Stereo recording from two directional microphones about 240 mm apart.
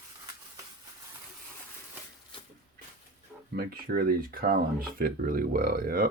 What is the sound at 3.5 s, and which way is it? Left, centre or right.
Speech, right.